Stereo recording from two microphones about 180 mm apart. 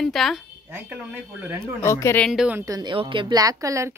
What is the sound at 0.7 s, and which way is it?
Speech, 10° right (ahead or behind).